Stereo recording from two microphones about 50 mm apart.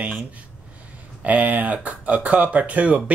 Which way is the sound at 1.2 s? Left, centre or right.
Right.